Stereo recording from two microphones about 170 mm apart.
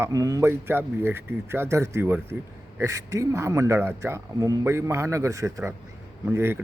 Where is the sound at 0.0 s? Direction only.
20° right (ahead or behind).